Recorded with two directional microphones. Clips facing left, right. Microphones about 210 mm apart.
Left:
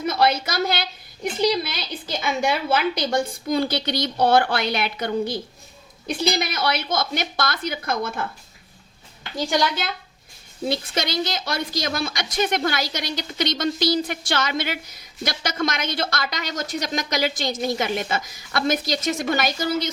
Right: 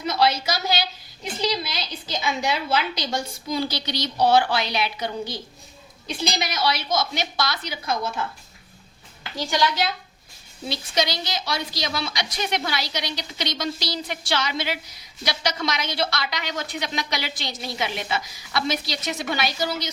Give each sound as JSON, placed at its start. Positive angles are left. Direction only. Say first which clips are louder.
{"t": 0.0, "sound": "a woman's voice", "louder": "left 1 dB", "side_deg": 50}
{"t": 10.7, "sound": "a woman's voice", "louder": "left 1 dB", "side_deg": 55}